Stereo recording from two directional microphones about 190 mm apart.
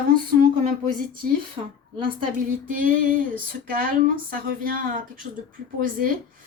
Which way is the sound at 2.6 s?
45° right (ahead or behind).